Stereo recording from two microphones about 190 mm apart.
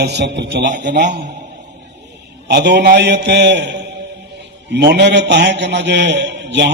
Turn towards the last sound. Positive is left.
turn(degrees=-65)  # may be behind; listen again after turning